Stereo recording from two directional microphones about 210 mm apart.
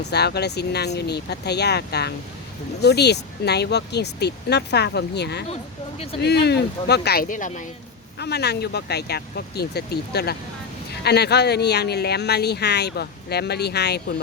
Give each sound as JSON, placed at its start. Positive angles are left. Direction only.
{"t": 0.0, "sound": "speech", "side_deg": 50}
{"t": 8.2, "sound": "speech", "side_deg": 50}